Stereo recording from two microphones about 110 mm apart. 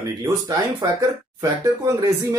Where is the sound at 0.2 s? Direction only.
30° right (ahead or behind).